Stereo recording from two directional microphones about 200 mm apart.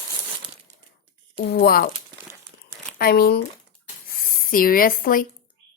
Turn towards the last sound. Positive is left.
turn(degrees=45)  # may be behind; listen again after turning